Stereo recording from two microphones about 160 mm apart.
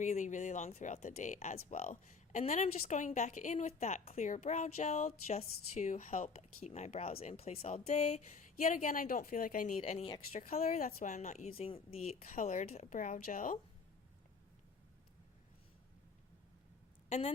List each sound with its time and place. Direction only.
0.0 s speech: 50° left (ahead or behind)
12.3 s a woman's voice: 55° left (ahead or behind)
17.1 s a woman's voice: 40° left (ahead or behind)